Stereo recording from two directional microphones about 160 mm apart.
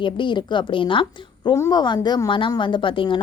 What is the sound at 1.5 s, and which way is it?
Speech, 20° left (ahead or behind).